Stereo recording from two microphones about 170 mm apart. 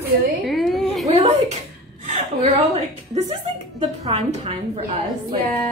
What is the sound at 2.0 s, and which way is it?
Chuckle, 35° right (ahead or behind).